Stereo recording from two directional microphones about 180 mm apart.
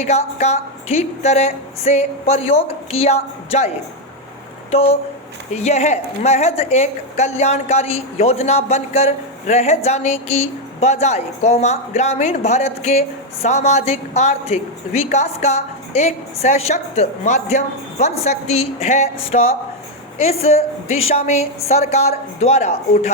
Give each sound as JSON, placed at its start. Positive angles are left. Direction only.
{"t": 0.0, "sound": "a woman's voice", "side_deg": 40}
{"t": 4.7, "sound": "a woman's voice", "side_deg": 35}